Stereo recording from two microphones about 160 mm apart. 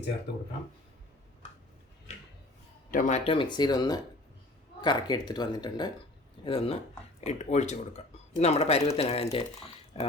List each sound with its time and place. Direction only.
2.9 s speech: 55° left (ahead or behind)
3.2 s speech: 30° left (ahead or behind)